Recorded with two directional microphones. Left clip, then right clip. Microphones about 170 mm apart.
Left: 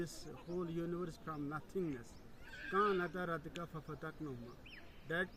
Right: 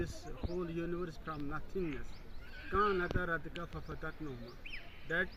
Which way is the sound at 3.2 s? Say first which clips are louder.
Right 4 dB; 20° left (ahead or behind).